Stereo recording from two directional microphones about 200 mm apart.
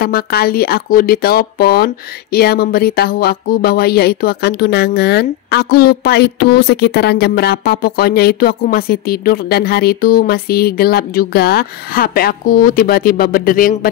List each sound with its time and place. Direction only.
0.0 s speech: 50° left (ahead or behind)